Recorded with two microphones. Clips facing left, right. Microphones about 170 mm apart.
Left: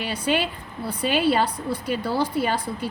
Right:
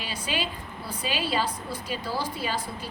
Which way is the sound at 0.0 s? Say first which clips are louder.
Left 7 dB; 60° left (ahead or behind).